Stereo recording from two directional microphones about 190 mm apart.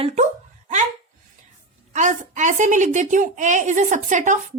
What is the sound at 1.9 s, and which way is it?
A woman's voice, 40° right (ahead or behind).